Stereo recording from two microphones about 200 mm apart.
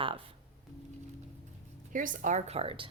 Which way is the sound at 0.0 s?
25° right (ahead or behind).